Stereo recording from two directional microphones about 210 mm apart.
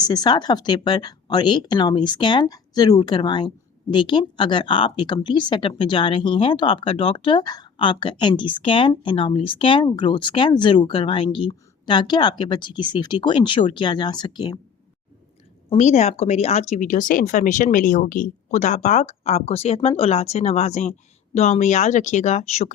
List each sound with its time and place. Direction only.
0.0 s speech: 20° left (ahead or behind)
15.7 s speech: 35° left (ahead or behind)